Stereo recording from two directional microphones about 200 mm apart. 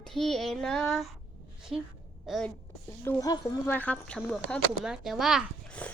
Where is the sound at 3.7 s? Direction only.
5° left (ahead or behind).